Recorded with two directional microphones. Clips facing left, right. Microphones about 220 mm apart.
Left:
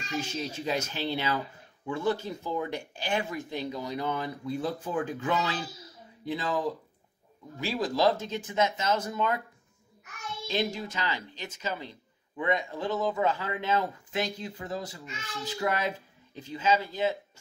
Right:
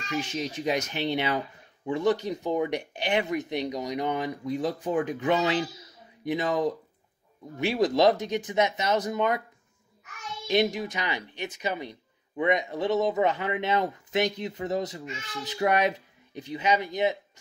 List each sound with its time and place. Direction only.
0.1 s speech: 15° right (ahead or behind)
10.4 s speech: 15° right (ahead or behind)
15.4 s child singing: 20° right (ahead or behind)
16.3 s speech: 15° right (ahead or behind)